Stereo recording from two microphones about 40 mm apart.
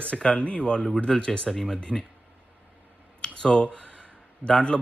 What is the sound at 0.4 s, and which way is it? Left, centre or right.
Speech, left.